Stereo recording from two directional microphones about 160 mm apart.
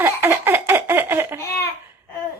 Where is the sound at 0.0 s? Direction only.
15° right (ahead or behind).